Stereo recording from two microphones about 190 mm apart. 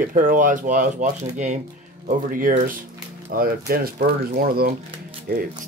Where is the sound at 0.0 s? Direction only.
45° right (ahead or behind).